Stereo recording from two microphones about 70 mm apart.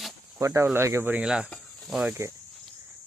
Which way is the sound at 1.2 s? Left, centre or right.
Centre.